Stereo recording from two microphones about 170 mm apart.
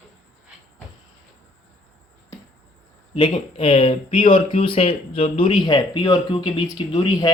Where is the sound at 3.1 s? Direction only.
30° left (ahead or behind).